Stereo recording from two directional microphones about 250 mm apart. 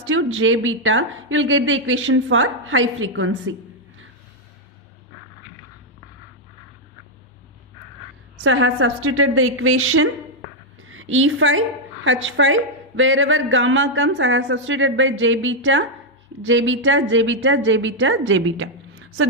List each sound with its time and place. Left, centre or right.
0.3 s a woman's voice: right
8.4 s a woman's voice: right